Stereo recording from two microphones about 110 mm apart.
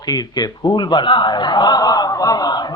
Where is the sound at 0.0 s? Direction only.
35° left (ahead or behind).